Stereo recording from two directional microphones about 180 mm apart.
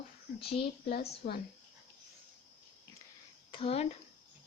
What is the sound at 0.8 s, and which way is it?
Speech, 60° left (ahead or behind).